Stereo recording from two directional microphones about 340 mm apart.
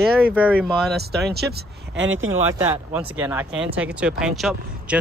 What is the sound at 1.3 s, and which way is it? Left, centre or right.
Speech, right.